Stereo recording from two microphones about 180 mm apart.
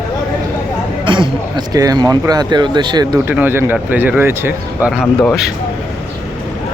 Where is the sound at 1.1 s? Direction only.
25° right (ahead or behind).